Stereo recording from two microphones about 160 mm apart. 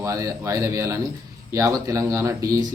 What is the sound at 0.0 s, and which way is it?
A man's voice, 20° right (ahead or behind).